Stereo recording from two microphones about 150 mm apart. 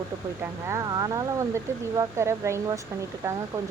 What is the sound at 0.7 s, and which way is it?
Speech, 25° right (ahead or behind).